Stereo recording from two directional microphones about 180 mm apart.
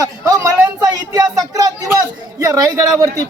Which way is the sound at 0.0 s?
20° right (ahead or behind).